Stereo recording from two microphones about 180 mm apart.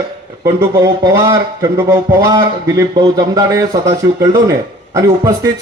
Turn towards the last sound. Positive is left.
turn(degrees=-20)  # may be behind; listen again after turning